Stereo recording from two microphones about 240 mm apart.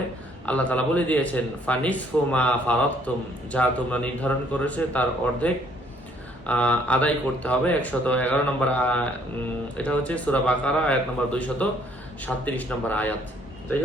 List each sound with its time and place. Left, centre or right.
0.4 s speech: centre